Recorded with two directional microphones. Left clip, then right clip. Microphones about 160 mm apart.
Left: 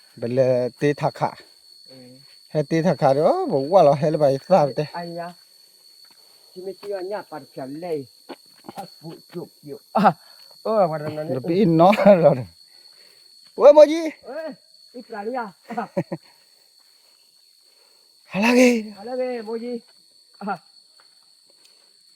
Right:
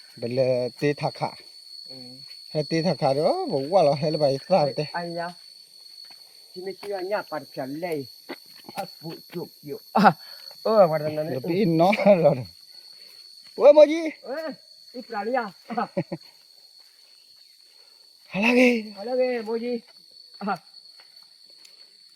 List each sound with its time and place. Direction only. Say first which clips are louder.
0.2 s speech: left 4 dB; 40° left (ahead or behind)
2.5 s speech: left 4 dB; 50° left (ahead or behind)
4.9 s speech: right 1 dB; centre (ahead or behind)
6.7 s speech: even; centre (ahead or behind)
7.6 s speech: left 3 dB; 5° right (ahead or behind)
9.9 s speech: left 1 dB; 20° left (ahead or behind)
10.6 s speech: right 2 dB; 5° left (ahead or behind)
11.3 s speech: left 8 dB; 40° left (ahead or behind)
13.6 s speech: left 3 dB; 35° left (ahead or behind)
14.3 s speech: even; 5° right (ahead or behind)
16.0 s speech: left 3 dB; 25° left (ahead or behind)
18.3 s speech: left 3 dB; 40° left (ahead or behind)
18.9 s speech: right 2 dB; 10° right (ahead or behind)